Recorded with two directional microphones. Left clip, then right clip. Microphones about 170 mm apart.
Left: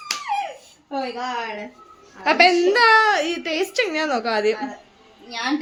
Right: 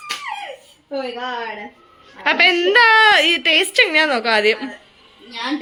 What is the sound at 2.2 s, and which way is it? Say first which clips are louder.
A woman's voice: right 1 dB; 5° left (ahead or behind).